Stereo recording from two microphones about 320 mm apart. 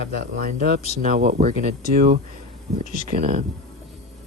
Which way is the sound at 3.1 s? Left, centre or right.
Right.